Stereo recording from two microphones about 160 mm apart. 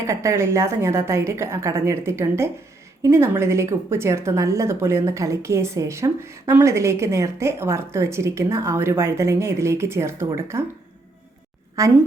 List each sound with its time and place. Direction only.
0.0 s a woman's voice: 20° right (ahead or behind)
11.8 s a woman's voice: 20° right (ahead or behind)